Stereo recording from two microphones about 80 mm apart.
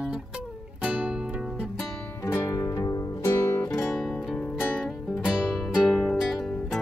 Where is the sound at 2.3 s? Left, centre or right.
Left.